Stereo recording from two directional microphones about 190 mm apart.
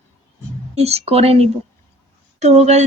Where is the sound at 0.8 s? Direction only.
35° right (ahead or behind).